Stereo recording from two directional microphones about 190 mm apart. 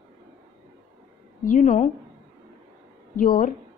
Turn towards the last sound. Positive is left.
turn(degrees=45)  # may be behind; listen again after turning